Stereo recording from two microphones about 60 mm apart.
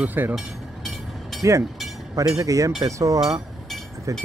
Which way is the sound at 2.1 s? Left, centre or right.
Right.